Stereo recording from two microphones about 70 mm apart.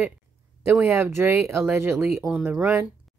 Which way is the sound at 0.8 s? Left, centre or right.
Right.